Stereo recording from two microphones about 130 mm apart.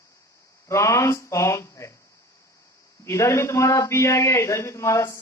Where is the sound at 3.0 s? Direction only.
20° left (ahead or behind).